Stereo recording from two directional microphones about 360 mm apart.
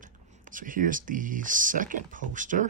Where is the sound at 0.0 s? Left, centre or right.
Right.